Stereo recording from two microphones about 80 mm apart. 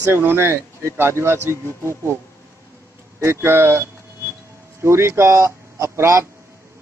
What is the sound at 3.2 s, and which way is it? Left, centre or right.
A man's voice, right.